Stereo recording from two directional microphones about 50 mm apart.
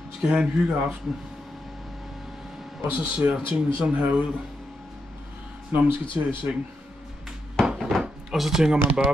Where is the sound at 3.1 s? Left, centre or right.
Centre.